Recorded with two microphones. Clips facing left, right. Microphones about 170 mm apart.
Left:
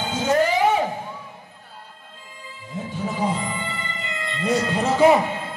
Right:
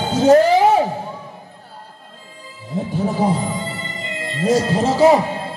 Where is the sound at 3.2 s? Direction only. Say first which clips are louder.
Right 3 dB; 35° right (ahead or behind).